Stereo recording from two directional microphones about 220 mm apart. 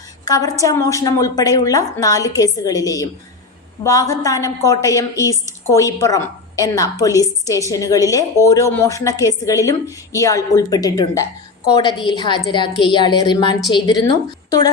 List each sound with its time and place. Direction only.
0.3 s a woman's voice: 15° left (ahead or behind)